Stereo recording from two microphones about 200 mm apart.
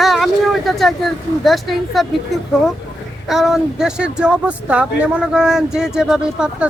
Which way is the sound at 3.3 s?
Centre (ahead or behind).